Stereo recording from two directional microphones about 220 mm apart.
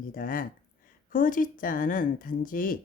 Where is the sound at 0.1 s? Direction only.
40° left (ahead or behind).